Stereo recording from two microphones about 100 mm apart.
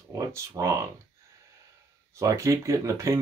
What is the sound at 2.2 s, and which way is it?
Speech, 30° right (ahead or behind).